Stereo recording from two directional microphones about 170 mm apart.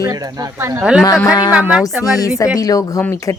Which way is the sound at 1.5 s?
5° right (ahead or behind).